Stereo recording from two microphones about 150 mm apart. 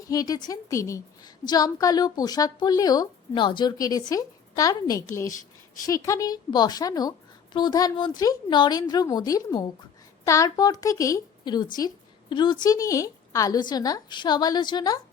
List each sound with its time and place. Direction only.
0.1 s a woman's voice: 25° left (ahead or behind)